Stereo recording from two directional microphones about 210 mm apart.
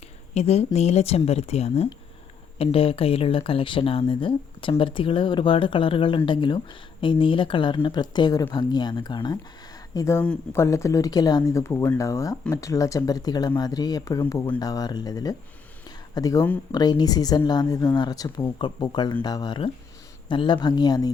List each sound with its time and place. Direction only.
0.3 s speech: 30° left (ahead or behind)